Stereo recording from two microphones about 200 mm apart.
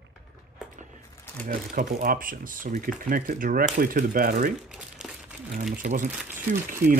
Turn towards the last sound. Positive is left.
turn(degrees=-40)  # may be behind; listen again after turning